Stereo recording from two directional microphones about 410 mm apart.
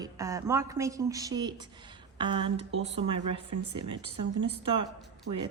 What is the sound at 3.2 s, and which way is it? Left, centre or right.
Speech, right.